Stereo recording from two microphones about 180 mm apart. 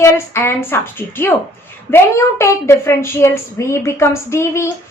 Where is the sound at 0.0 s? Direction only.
15° left (ahead or behind).